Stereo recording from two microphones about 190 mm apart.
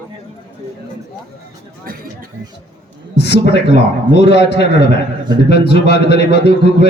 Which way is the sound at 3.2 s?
60° left (ahead or behind).